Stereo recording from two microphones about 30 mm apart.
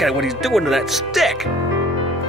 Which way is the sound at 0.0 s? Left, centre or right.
Centre.